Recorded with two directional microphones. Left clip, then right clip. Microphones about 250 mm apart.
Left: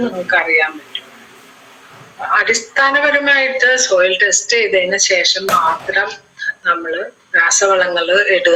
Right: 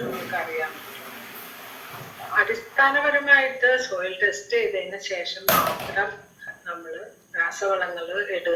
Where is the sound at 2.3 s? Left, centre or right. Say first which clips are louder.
Left 7 dB; left.